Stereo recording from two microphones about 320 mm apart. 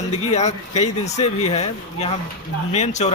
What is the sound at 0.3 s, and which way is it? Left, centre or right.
Speech, left.